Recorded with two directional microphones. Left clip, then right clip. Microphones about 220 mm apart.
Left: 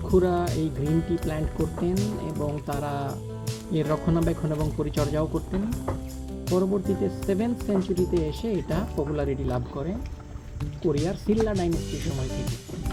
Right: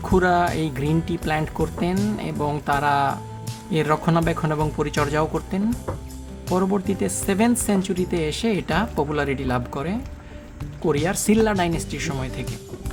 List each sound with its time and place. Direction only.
0.2 s speech: 10° right (ahead or behind)
11.1 s speech: 10° right (ahead or behind)